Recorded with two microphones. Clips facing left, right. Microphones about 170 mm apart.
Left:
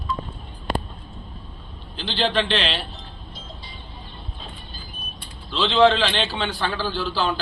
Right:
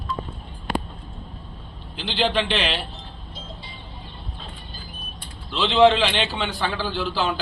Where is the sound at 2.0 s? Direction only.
10° right (ahead or behind).